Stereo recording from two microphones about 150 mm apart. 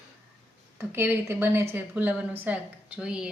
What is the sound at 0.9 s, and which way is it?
A woman's voice, 15° right (ahead or behind).